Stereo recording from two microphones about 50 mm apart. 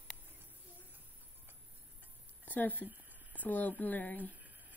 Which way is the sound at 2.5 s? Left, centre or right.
Left.